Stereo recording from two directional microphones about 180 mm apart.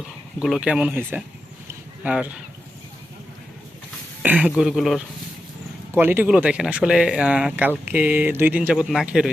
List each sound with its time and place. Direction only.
0.3 s speech: 5° right (ahead or behind)
4.2 s speech: 10° right (ahead or behind)
6.0 s speech: 10° right (ahead or behind)